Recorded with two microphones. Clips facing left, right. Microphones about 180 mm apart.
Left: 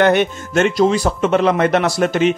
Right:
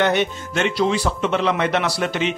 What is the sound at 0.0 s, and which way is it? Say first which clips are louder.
Speech: left 5 dB; 55° left (ahead or behind).